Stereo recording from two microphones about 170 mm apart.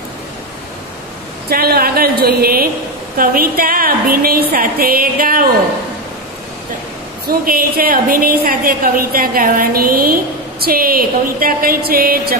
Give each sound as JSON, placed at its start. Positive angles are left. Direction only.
{"t": 1.5, "sound": "a woman's voice", "side_deg": -65}
{"t": 7.2, "sound": "a woman's voice", "side_deg": -60}